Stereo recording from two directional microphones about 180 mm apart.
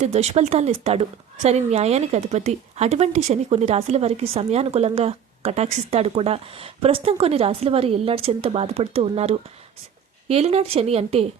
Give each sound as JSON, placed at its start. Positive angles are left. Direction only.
{"t": 0.0, "sound": "a woman's voice", "side_deg": -40}